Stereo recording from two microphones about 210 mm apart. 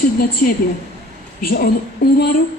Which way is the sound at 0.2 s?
45° left (ahead or behind).